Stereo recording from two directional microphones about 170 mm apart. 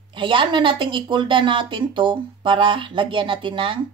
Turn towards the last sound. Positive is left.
turn(degrees=-30)  # may be behind; listen again after turning